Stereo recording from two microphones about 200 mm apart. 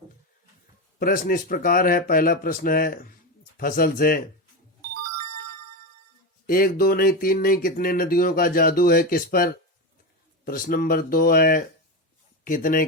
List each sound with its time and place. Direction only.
0.9 s speech: 45° left (ahead or behind)
6.5 s speech: 45° left (ahead or behind)